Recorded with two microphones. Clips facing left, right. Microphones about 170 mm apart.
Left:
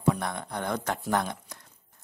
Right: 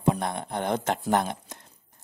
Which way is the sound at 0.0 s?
25° right (ahead or behind).